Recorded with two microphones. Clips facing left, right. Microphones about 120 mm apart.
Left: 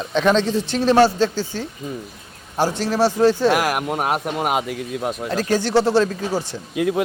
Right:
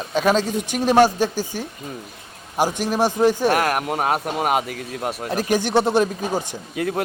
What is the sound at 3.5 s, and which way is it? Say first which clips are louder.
Speech: even; 5° left (ahead or behind).